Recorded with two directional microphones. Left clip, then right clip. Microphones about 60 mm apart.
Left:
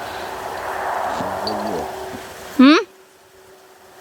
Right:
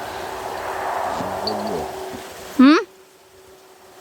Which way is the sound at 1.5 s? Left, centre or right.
Right.